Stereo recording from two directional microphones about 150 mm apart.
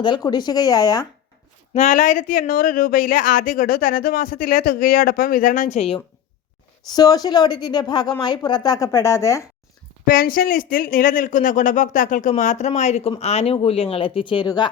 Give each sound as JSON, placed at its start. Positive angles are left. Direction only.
{"t": 0.0, "sound": "a woman's voice", "side_deg": 30}
{"t": 1.7, "sound": "speech", "side_deg": 55}
{"t": 6.9, "sound": "a woman's voice", "side_deg": 25}
{"t": 10.1, "sound": "speech", "side_deg": 70}